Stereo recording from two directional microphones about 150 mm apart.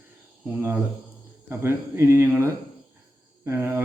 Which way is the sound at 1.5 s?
15° right (ahead or behind).